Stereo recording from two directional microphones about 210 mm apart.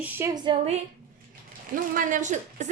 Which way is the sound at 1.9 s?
35° right (ahead or behind).